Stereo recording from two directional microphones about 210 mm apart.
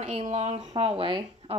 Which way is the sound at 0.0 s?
30° right (ahead or behind).